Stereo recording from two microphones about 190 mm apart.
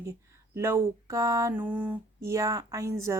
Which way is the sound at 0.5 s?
15° right (ahead or behind).